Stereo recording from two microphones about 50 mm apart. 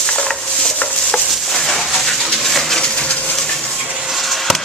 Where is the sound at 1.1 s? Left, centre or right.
Centre.